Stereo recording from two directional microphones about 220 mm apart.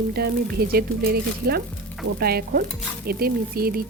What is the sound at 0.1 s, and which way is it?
Speech, 45° right (ahead or behind).